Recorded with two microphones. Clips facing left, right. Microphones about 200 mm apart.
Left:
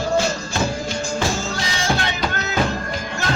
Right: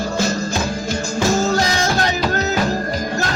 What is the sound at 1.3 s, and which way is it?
Music, 40° right (ahead or behind).